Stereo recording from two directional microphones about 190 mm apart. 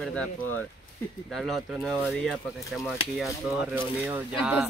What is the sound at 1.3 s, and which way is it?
Speech, centre (ahead or behind).